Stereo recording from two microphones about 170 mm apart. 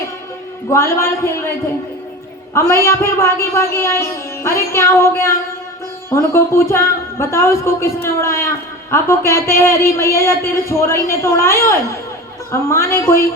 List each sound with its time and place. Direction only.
0.7 s a woman's voice: 15° left (ahead or behind)
2.6 s a woman's voice: 15° left (ahead or behind)